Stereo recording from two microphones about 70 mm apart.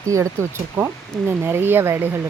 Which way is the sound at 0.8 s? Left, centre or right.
Right.